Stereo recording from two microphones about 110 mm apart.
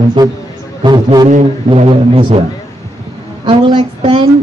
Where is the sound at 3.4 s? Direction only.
50° right (ahead or behind).